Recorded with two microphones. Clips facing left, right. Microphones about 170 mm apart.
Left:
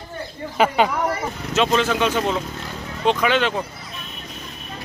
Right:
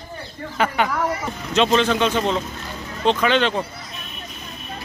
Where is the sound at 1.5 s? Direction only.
5° left (ahead or behind).